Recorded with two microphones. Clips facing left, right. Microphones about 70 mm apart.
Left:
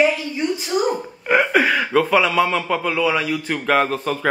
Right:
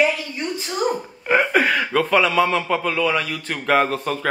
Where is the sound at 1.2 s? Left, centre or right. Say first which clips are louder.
Left 1 dB; centre.